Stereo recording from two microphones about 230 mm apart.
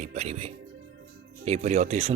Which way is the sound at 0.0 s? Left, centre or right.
Right.